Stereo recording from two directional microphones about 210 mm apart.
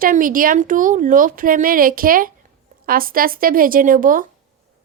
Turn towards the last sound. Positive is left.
turn(degrees=-40)  # may be behind; listen again after turning